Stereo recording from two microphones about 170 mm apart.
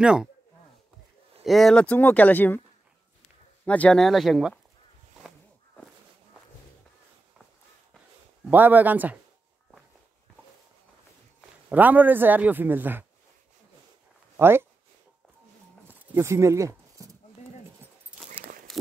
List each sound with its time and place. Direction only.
0.0 s speech: 5° right (ahead or behind)
1.4 s speech: centre (ahead or behind)
3.6 s speech: 5° left (ahead or behind)
8.5 s a man's voice: 10° right (ahead or behind)
11.7 s a man's voice: 10° right (ahead or behind)
14.3 s speech: 15° right (ahead or behind)
15.9 s a sound: 15° right (ahead or behind)
17.8 s keys jangling: 15° right (ahead or behind)
18.7 s a sound: centre (ahead or behind)